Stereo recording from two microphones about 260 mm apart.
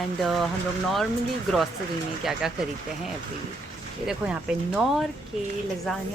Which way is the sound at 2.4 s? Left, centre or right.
Centre.